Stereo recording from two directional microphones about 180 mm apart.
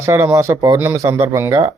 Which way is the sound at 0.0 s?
15° right (ahead or behind).